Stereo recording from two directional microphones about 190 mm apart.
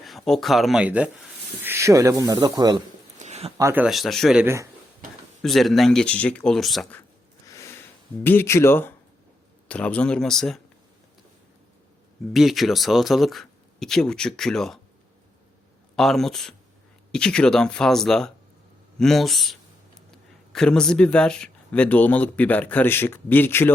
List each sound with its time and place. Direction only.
0.0 s speech: centre (ahead or behind); by 2.8 s 20° right (ahead or behind)
3.2 s a sound: 35° right (ahead or behind)
3.6 s speech: 15° right (ahead or behind)
3.8 s speech: centre (ahead or behind)
4.4 s speech: 15° right (ahead or behind)
5.4 s speech: centre (ahead or behind)
7.4 s sniff: 15° left (ahead or behind)
8.2 s speech: 10° left (ahead or behind)
12.3 s speech: centre (ahead or behind)
16.0 s speech: centre (ahead or behind)